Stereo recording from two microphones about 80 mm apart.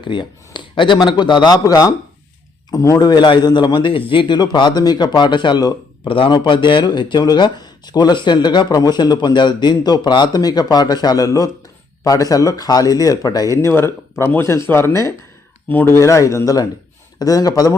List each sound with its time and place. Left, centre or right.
0.0 s a man's voice: left
1.6 s speech: left
3.1 s a man's voice: left
6.1 s speech: left
13.6 s speech: left
16.0 s speech: left